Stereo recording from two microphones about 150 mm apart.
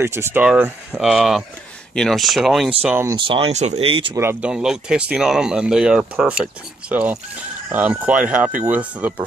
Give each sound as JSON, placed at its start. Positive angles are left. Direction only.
{"t": 0.0, "sound": "speech", "side_deg": -15}
{"t": 3.1, "sound": "speech", "side_deg": -35}
{"t": 4.2, "sound": "speech", "side_deg": -15}
{"t": 4.5, "sound": "speech", "side_deg": -5}